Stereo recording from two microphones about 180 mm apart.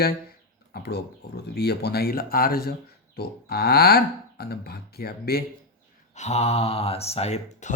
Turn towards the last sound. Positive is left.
turn(degrees=40)  # may be behind; listen again after turning